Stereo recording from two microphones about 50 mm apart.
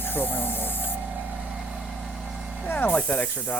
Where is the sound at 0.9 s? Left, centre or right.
Right.